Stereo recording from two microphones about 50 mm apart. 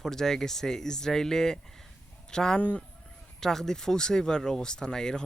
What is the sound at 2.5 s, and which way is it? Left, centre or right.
Speech, left.